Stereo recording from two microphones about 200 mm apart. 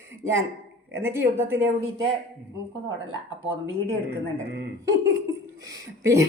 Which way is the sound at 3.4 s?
75° right (ahead or behind).